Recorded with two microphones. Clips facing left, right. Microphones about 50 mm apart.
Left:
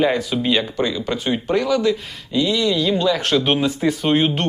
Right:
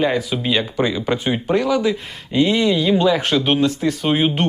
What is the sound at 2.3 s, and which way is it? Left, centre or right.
Speech, right.